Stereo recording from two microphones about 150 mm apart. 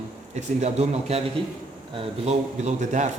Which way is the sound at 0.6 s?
45° right (ahead or behind).